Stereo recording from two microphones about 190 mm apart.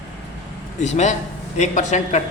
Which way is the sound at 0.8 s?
35° left (ahead or behind).